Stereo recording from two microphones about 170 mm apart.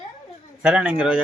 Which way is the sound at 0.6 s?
5° right (ahead or behind).